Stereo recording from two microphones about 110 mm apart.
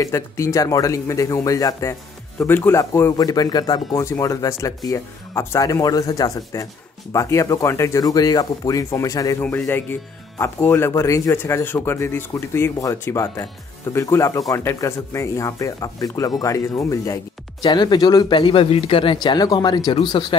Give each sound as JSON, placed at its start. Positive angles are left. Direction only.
{"t": 0.0, "sound": "speech", "side_deg": 30}
{"t": 9.7, "sound": "speech", "side_deg": 20}